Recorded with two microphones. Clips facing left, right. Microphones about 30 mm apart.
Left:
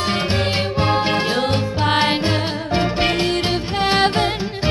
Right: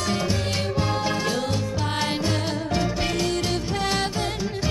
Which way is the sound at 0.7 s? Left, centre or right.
Left.